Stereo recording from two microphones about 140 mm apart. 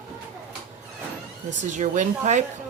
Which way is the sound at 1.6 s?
65° right (ahead or behind).